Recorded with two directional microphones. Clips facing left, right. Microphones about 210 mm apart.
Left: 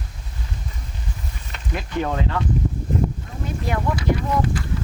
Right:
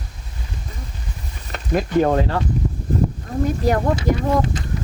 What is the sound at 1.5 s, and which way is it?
Speech, 45° right (ahead or behind).